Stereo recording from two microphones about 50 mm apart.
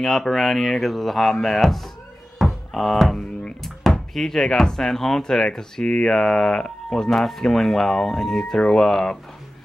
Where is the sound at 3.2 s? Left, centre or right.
Centre.